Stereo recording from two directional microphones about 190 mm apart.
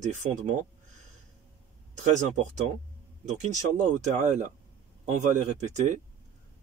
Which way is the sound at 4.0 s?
40° right (ahead or behind).